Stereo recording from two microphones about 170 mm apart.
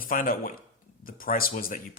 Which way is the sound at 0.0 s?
55° left (ahead or behind).